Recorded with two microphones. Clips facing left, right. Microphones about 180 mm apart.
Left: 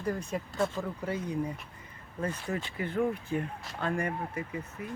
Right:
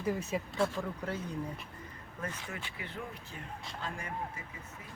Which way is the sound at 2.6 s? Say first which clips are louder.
Left 13 dB; 45° left (ahead or behind).